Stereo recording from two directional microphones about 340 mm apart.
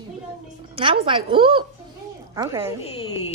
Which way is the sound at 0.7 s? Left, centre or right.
Centre.